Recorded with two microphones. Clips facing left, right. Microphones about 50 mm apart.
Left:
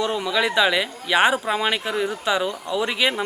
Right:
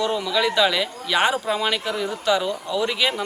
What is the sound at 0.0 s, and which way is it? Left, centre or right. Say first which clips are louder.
Speech: even; centre.